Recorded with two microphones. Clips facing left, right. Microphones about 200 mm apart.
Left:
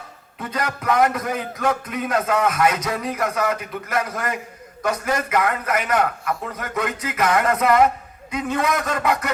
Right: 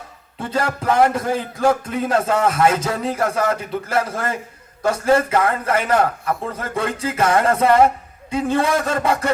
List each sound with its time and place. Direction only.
0.3 s a man's voice: 30° right (ahead or behind)